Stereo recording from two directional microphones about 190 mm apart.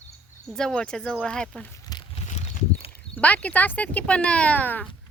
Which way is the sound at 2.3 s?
35° left (ahead or behind).